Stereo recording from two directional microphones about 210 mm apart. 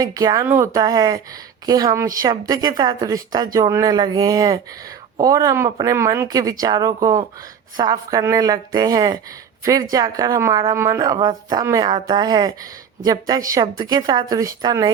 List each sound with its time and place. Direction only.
0.0 s a woman's voice: 15° right (ahead or behind)